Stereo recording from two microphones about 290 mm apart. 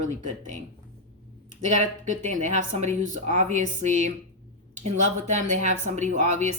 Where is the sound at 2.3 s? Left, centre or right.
Right.